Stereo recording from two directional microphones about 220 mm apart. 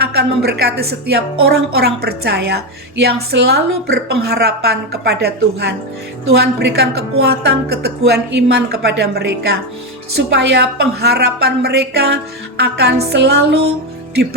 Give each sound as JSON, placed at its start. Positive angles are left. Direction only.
{"t": 0.0, "sound": "a woman's voice", "side_deg": -45}